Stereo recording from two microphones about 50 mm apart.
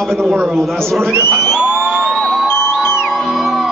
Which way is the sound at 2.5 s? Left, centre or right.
Left.